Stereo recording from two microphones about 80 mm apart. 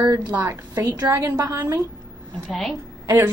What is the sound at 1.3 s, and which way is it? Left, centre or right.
Speech, right.